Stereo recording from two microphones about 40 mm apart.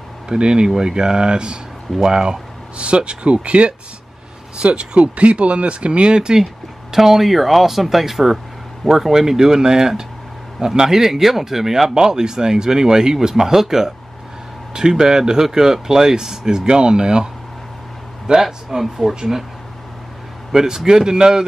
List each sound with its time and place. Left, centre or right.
0.3 s speech: right
20.5 s speech: centre